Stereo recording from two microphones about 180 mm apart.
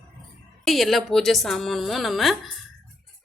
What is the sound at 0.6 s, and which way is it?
A woman's voice, centre (ahead or behind).